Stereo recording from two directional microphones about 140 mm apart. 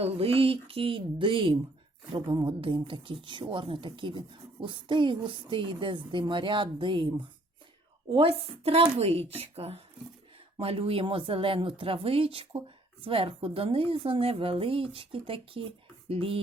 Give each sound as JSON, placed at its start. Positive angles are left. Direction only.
{"t": 0.0, "sound": "a woman's voice", "side_deg": -45}